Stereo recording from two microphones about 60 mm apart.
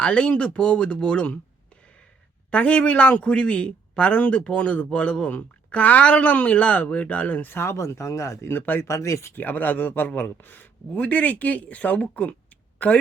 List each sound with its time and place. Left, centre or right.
0.0 s speech: centre
2.5 s speech: left
7.5 s speech: left
8.5 s speech: left
8.8 s speech: left
9.3 s speech: left